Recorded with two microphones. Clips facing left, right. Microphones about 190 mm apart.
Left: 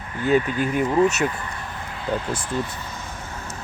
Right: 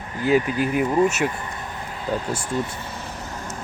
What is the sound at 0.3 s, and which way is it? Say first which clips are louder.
Speech: even; 10° right (ahead or behind).